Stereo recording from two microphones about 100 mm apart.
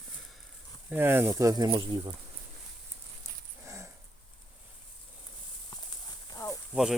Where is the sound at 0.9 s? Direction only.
20° right (ahead or behind).